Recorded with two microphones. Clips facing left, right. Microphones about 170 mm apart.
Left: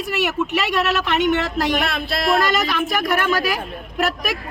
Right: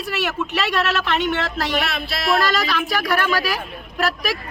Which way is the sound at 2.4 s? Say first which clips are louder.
Left 1 dB; 20° left (ahead or behind).